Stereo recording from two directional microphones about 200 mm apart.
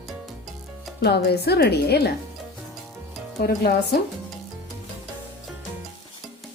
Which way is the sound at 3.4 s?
50° left (ahead or behind).